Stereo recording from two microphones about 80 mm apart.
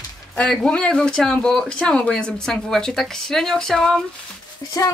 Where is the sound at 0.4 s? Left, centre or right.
Centre.